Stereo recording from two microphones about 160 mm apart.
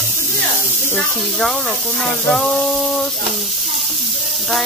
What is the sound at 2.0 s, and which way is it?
Speech, 5° left (ahead or behind).